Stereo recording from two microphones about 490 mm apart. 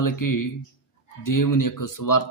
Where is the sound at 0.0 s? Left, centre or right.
Left.